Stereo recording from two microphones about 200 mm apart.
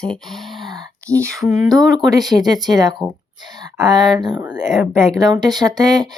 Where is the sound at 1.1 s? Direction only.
15° right (ahead or behind).